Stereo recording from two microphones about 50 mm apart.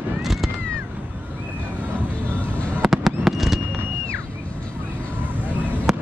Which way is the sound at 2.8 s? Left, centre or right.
Centre.